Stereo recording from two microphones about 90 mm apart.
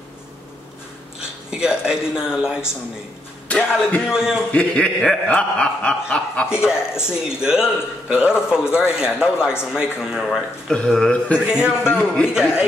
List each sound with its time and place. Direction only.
1.5 s a man's voice: 10° right (ahead or behind)
3.4 s a man's voice: 15° left (ahead or behind)
4.0 s a man's voice: 10° right (ahead or behind)
4.5 s speech: 10° left (ahead or behind)
6.5 s a man's voice: 10° right (ahead or behind)
10.7 s speech: 10° left (ahead or behind)
11.4 s a man's voice: 10° right (ahead or behind)
11.8 s speech: 15° left (ahead or behind)